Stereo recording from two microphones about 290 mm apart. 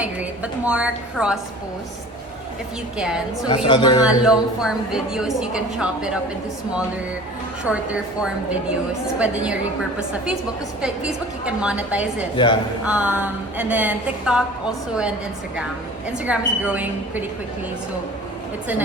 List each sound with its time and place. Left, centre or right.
0.0 s a woman's voice: centre
3.0 s a woman's voice: centre
3.5 s a woman's voice: centre
4.0 s a woman's voice: centre
7.7 s a woman's voice: centre
16.0 s a woman's voice: centre